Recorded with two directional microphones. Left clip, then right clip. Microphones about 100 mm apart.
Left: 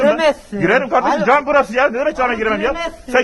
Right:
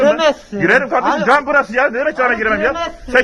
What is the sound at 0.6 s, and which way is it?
A man's voice, 35° left (ahead or behind).